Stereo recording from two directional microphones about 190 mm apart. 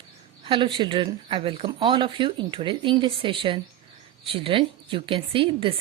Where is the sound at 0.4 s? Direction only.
25° right (ahead or behind).